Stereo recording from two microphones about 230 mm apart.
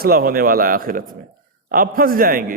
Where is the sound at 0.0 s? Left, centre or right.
Right.